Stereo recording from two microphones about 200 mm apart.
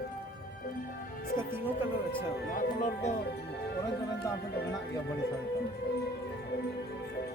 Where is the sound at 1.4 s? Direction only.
10° right (ahead or behind).